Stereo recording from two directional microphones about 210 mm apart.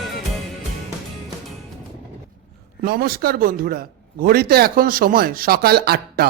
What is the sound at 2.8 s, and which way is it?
A man's voice, 45° right (ahead or behind).